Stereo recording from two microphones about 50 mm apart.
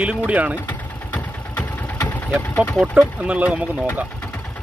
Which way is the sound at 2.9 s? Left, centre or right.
Right.